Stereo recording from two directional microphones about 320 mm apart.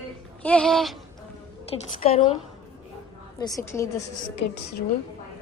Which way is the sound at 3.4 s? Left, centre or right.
Centre.